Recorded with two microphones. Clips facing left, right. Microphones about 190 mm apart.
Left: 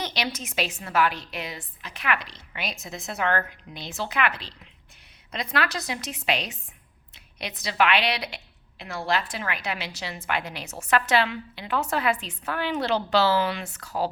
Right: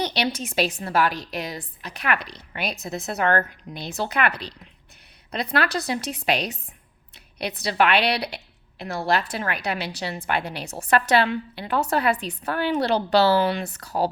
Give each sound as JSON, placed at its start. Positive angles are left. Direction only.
{"t": 0.0, "sound": "a woman's voice", "side_deg": -35}